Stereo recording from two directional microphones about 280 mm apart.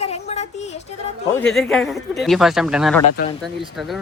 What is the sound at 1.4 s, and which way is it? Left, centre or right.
Speech, centre.